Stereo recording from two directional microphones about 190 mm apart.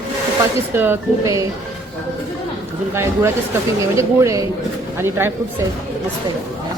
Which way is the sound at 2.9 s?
15° right (ahead or behind).